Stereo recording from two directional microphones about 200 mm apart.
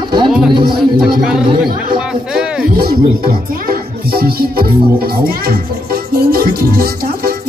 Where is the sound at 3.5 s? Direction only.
50° right (ahead or behind).